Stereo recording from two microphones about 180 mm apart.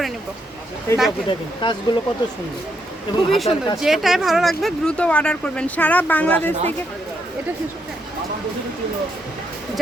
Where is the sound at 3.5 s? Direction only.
25° left (ahead or behind).